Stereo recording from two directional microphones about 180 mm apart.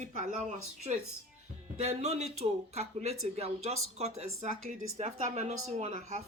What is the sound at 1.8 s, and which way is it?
Speech, 35° right (ahead or behind).